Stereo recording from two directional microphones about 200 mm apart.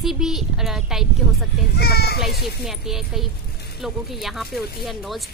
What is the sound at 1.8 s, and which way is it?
Children playing, 55° left (ahead or behind).